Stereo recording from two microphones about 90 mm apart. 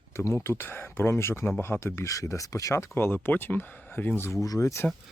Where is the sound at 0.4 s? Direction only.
25° left (ahead or behind).